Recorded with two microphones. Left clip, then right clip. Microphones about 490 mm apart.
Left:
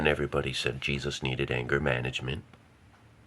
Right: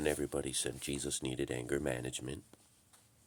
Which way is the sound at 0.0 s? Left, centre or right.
Right.